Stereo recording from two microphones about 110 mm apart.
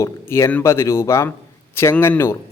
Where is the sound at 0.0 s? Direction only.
25° left (ahead or behind).